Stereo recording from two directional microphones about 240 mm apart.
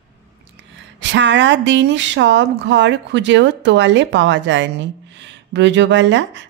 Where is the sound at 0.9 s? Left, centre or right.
Right.